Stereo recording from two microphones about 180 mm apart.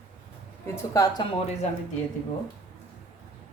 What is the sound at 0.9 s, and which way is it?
Speech, 20° left (ahead or behind).